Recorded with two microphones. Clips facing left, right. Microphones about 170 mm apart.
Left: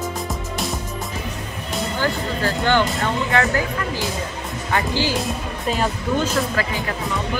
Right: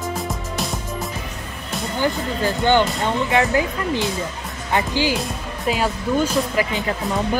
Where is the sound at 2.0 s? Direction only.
15° right (ahead or behind).